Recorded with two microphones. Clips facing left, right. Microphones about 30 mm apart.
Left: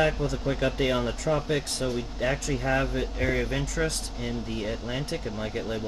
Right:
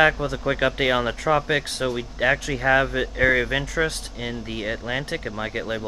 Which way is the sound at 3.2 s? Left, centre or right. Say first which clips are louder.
Right 9 dB; right.